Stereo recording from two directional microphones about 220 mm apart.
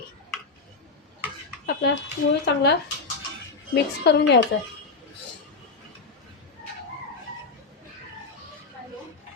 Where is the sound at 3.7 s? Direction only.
50° left (ahead or behind).